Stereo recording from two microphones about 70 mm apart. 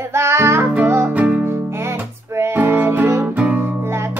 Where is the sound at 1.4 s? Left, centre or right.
Right.